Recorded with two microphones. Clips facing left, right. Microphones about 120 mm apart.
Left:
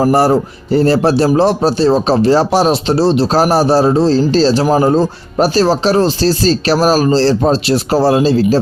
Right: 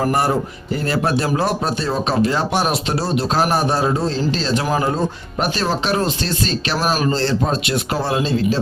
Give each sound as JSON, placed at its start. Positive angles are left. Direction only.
{"t": 0.0, "sound": "speech", "side_deg": 30}